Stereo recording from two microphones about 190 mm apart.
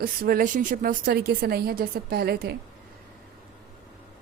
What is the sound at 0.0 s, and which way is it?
A woman's voice, 50° right (ahead or behind).